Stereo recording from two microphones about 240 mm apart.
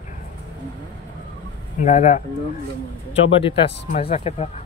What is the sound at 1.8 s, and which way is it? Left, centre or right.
Speech, left.